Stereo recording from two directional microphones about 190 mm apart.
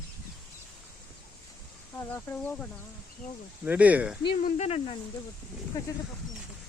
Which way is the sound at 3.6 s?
5° right (ahead or behind).